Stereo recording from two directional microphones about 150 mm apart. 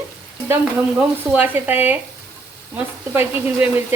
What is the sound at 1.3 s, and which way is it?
Speech, 10° right (ahead or behind).